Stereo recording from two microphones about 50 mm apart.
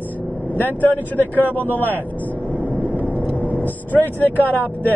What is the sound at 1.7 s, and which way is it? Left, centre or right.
Speech, left.